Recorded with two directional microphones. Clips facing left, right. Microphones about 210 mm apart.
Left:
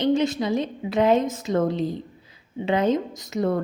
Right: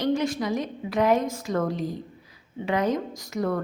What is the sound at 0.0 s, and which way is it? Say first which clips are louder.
A woman's voice: left 3 dB; 25° left (ahead or behind).